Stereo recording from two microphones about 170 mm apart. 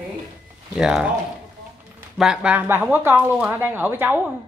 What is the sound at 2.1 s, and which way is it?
Speech, 5° right (ahead or behind).